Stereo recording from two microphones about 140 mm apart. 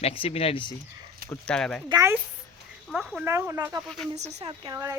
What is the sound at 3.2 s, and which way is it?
Speech, 20° right (ahead or behind).